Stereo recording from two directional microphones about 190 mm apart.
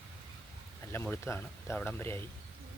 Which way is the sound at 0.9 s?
10° left (ahead or behind).